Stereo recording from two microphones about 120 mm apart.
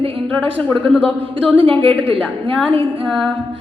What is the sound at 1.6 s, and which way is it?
Speech, 50° right (ahead or behind).